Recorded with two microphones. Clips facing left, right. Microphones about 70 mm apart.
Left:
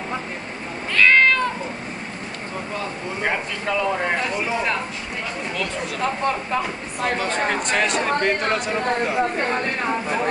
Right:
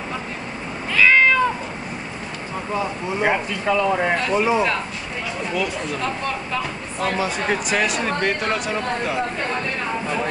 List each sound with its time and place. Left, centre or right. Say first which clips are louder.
0.9 s cat: right 1 dB; centre
3.2 s speech: right 4 dB; centre
5.5 s speech: right 5 dB; centre
6.0 s speech: left 3 dB; left
7.4 s speech: even; centre
9.4 s speech: left 2 dB; left